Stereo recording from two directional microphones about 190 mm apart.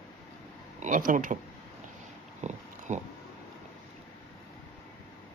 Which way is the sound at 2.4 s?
40° right (ahead or behind).